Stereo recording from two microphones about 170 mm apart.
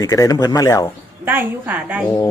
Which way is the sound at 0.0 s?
20° left (ahead or behind).